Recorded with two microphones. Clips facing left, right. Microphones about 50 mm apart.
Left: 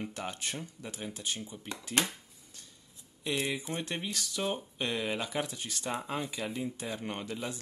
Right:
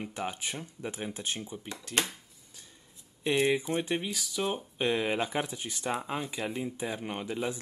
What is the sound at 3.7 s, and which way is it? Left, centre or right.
Speech, centre.